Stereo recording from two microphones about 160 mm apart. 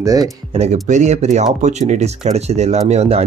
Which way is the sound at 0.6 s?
50° right (ahead or behind).